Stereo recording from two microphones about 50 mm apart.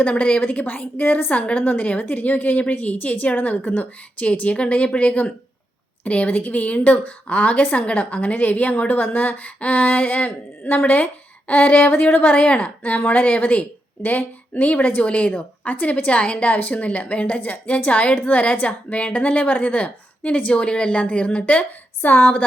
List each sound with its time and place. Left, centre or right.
0.1 s speech: left
4.3 s a woman's voice: left